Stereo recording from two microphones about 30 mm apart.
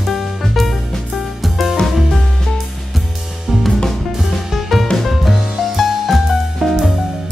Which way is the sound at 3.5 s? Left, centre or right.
Centre.